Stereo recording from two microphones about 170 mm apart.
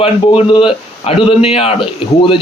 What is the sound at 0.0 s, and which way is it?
A man's voice, 30° left (ahead or behind).